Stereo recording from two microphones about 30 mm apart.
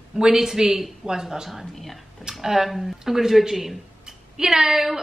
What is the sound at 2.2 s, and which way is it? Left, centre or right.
A woman's voice, centre.